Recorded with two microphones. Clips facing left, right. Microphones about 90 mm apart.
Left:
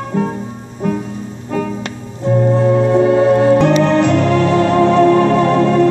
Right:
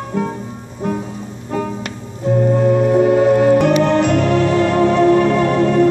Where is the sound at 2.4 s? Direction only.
35° left (ahead or behind).